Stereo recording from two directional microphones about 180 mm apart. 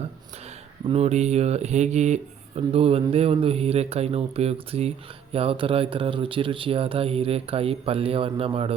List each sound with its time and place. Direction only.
0.9 s speech: 35° right (ahead or behind)